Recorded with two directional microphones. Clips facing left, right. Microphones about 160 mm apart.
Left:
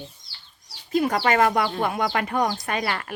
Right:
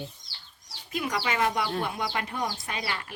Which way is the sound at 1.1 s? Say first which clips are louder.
Left 5 dB; 55° left (ahead or behind).